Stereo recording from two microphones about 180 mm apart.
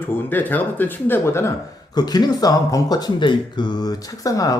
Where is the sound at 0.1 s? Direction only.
10° left (ahead or behind).